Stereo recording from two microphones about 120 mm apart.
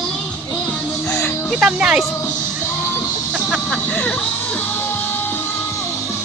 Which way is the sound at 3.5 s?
10° left (ahead or behind).